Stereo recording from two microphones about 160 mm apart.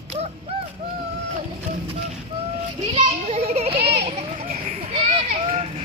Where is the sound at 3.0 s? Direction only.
45° right (ahead or behind).